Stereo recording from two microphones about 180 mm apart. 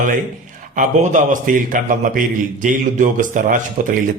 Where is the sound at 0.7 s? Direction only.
45° right (ahead or behind).